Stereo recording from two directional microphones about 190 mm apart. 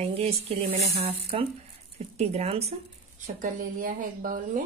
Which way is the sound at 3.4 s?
45° right (ahead or behind).